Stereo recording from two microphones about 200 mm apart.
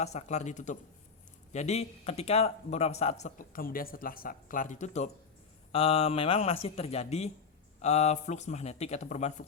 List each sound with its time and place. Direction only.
0.0 s speech: 35° left (ahead or behind)